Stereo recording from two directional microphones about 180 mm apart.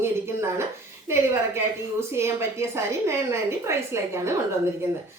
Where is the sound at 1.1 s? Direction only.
15° right (ahead or behind).